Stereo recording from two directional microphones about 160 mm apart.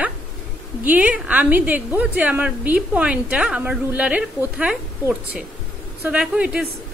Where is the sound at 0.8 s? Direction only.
10° right (ahead or behind).